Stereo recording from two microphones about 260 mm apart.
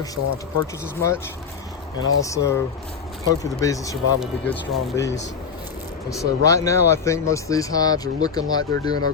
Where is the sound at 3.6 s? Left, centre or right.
Centre.